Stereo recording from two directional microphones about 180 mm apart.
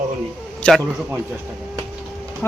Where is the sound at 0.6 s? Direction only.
5° left (ahead or behind).